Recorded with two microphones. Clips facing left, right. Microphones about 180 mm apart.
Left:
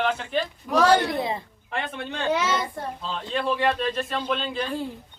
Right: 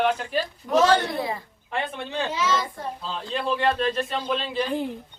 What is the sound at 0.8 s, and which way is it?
Speech, 15° left (ahead or behind).